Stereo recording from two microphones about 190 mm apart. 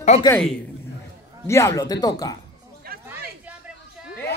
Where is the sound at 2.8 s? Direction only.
50° right (ahead or behind).